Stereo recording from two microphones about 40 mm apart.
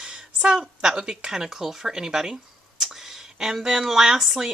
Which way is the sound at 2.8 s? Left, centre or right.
Centre.